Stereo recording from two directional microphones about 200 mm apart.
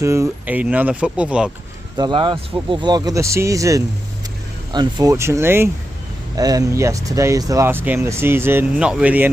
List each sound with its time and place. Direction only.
0.0 s speech: 15° right (ahead or behind)
2.0 s speech: 20° right (ahead or behind)